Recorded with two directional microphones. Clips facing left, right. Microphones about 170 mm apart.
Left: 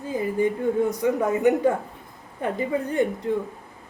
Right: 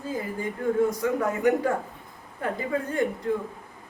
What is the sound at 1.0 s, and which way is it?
A woman's voice, 20° left (ahead or behind).